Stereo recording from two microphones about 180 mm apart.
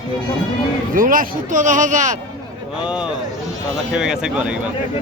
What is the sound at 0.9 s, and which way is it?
Speech, 50° right (ahead or behind).